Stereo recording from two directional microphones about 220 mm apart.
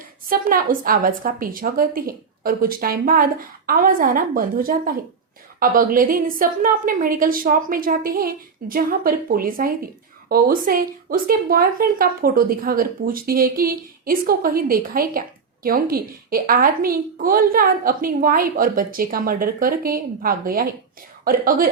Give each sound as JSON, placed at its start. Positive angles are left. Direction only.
{"t": 0.3, "sound": "a woman's voice", "side_deg": -40}